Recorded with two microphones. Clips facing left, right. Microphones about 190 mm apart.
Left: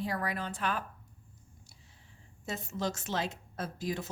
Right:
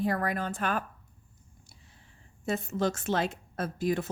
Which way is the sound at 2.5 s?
55° right (ahead or behind).